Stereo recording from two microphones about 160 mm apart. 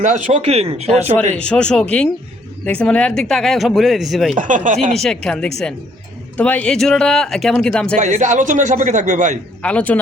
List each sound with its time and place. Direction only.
0.0 s a man's voice: 50° right (ahead or behind)
1.4 s speech: 5° left (ahead or behind)
4.4 s a man's voice: 55° right (ahead or behind)
4.9 s speech: 5° left (ahead or behind)
7.9 s a man's voice: 50° right (ahead or behind)
9.6 s speech: 10° left (ahead or behind)